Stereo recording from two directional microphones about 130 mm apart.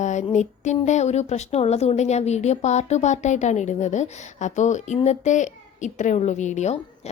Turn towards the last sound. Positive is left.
turn(degrees=60)  # may be behind; listen again after turning